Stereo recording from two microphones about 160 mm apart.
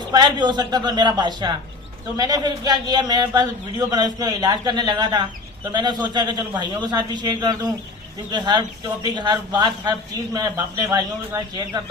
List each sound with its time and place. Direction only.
0.1 s a man's voice: 25° right (ahead or behind)